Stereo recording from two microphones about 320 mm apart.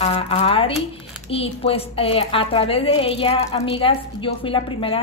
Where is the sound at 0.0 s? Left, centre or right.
Centre.